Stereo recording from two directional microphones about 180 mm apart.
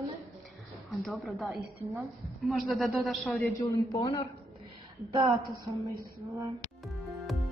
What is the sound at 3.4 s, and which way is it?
Speech, 15° left (ahead or behind).